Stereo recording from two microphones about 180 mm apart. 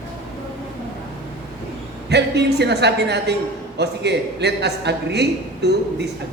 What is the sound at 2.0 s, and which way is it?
A man's voice, 70° right (ahead or behind).